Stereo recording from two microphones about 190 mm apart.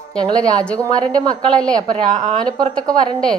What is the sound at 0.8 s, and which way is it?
Speech, 20° right (ahead or behind).